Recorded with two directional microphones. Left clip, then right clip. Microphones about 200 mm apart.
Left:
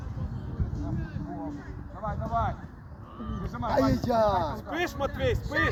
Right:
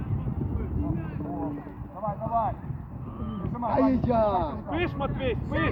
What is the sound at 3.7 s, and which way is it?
Speech, 35° left (ahead or behind).